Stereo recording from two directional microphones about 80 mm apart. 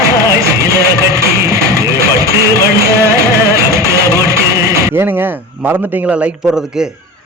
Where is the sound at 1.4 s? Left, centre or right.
Right.